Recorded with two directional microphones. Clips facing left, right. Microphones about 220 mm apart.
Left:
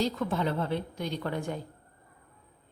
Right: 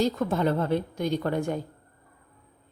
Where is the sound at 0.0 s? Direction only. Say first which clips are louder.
Right 4 dB; 45° right (ahead or behind).